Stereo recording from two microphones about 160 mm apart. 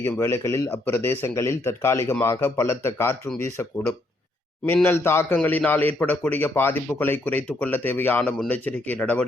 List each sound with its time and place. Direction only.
0.0 s speech: 15° left (ahead or behind)